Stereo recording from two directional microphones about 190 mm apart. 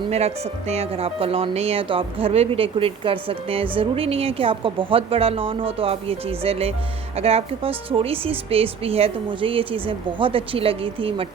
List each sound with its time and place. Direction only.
0.1 s speech: 35° right (ahead or behind)